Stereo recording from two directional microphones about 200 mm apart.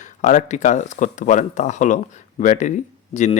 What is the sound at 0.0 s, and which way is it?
Speech, 35° left (ahead or behind).